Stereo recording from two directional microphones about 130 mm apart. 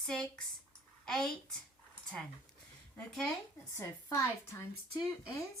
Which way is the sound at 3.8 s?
25° left (ahead or behind).